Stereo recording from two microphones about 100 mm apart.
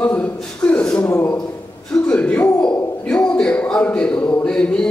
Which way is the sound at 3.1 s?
10° left (ahead or behind).